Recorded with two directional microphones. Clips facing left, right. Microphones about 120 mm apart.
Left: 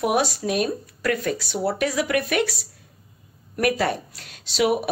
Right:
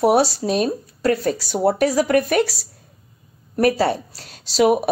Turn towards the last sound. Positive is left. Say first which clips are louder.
# right 5 dB
turn(degrees=-40)  # may be behind; listen again after turning